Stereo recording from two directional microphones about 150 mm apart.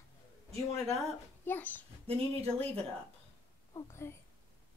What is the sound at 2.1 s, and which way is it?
Speech, 40° right (ahead or behind).